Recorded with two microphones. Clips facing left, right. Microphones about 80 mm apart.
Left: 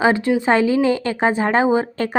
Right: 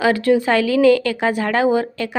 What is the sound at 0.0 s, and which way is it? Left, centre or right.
Speech, left.